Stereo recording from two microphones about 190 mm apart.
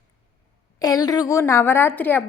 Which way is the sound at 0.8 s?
20° left (ahead or behind).